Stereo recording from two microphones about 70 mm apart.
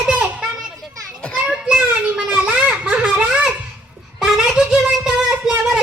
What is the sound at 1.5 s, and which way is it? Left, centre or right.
Child singing, centre.